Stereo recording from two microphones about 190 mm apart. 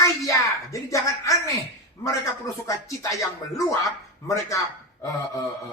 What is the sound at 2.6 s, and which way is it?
Music, 15° left (ahead or behind).